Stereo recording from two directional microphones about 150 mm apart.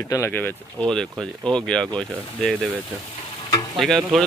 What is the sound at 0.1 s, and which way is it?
Speech, 15° left (ahead or behind).